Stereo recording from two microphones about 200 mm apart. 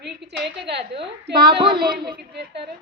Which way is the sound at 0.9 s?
25° right (ahead or behind).